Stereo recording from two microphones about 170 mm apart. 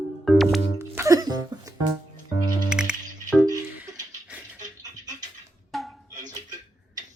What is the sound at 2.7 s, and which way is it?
Music, 5° right (ahead or behind).